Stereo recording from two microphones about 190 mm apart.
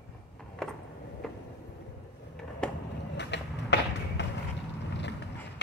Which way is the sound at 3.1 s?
65° left (ahead or behind).